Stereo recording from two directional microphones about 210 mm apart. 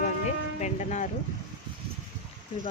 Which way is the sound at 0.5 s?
35° left (ahead or behind).